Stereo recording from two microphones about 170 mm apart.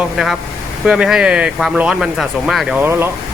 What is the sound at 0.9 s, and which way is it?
Speech, 5° right (ahead or behind).